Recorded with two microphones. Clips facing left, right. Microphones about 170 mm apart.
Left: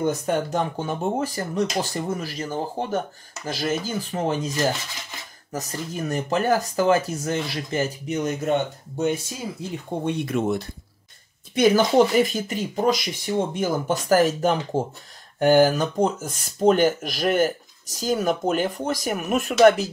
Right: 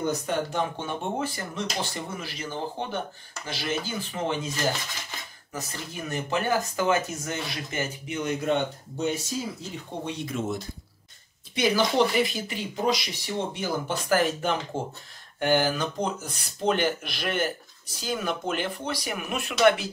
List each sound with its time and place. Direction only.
0.0 s speech: 45° left (ahead or behind)
5.5 s speech: 45° left (ahead or behind); by 10.6 s 60° left (ahead or behind)
11.5 s speech: 50° left (ahead or behind)